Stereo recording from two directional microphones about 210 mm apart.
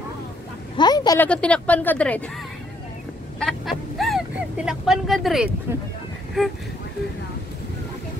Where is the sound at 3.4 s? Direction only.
Centre (ahead or behind).